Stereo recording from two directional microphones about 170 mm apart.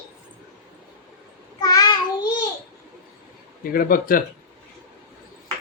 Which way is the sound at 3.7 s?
60° left (ahead or behind).